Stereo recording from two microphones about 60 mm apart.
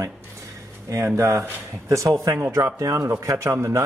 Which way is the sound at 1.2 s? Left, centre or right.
Right.